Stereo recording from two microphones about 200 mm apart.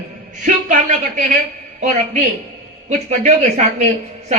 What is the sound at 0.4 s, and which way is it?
Speech, 40° right (ahead or behind).